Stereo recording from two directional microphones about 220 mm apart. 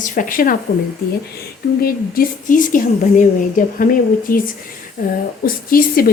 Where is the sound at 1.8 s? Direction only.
40° left (ahead or behind).